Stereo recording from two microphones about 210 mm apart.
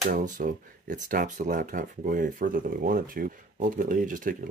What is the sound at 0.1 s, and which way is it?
Speech, 40° right (ahead or behind).